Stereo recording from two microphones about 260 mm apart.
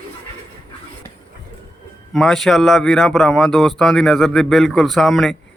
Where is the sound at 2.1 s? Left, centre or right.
Centre.